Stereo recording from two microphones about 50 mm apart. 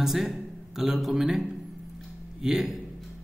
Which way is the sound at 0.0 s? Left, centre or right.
Centre.